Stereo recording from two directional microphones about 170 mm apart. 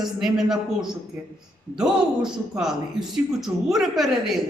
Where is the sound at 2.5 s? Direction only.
5° right (ahead or behind).